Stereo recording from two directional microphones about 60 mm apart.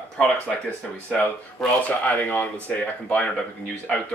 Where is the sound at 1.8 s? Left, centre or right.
Left.